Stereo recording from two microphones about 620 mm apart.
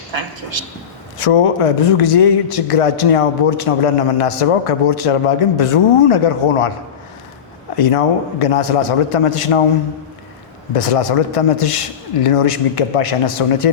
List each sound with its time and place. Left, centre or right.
0.6 s a man's voice: right
1.2 s a man's voice: left
7.8 s a man's voice: left
10.8 s a man's voice: left